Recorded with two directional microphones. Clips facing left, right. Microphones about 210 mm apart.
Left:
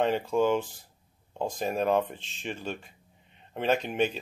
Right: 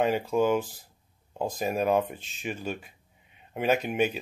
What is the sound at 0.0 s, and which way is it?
Speech, 5° right (ahead or behind).